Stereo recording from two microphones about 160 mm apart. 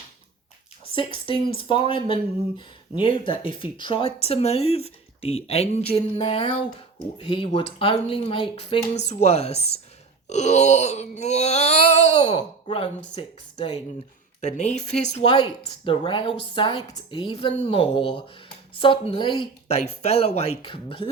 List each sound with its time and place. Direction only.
0.9 s speech: 35° left (ahead or behind)
7.2 s speech: 30° left (ahead or behind)
10.2 s a sound: 45° left (ahead or behind)
12.1 s speech: 30° left (ahead or behind)
14.4 s a sound: 45° left (ahead or behind)
15.3 s speech: 30° left (ahead or behind)
19.6 s speech: 45° left (ahead or behind)